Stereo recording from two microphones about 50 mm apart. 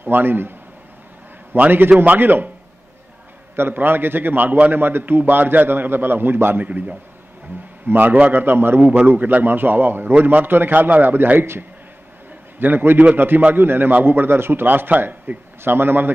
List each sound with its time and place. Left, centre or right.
0.0 s a man's voice: right
3.5 s a man's voice: right
6.6 s a man's voice: right
11.3 s a man's voice: right